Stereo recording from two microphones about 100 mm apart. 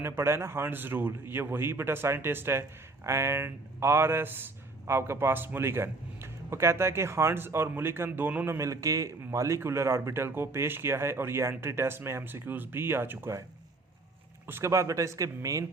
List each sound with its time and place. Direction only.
0.0 s speech: 25° right (ahead or behind)
8.5 s speech: 30° right (ahead or behind)
14.4 s speech: 25° right (ahead or behind)